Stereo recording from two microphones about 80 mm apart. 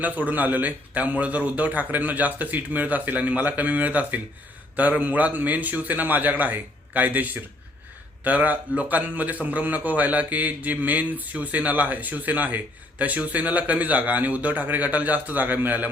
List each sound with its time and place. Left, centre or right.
0.0 s a man's voice: right